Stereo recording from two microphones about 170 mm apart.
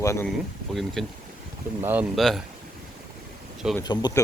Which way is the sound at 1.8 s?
10° right (ahead or behind).